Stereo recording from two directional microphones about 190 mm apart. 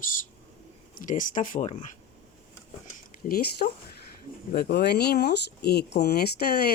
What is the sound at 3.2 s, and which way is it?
Speech, 50° left (ahead or behind).